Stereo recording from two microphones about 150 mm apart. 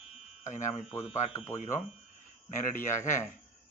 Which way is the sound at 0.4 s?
55° left (ahead or behind).